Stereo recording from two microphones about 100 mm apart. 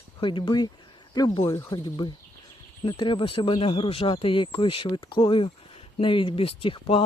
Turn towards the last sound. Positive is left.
turn(degrees=65)  # may be behind; listen again after turning